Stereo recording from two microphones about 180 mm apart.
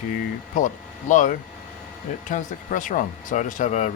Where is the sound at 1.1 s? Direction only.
45° left (ahead or behind).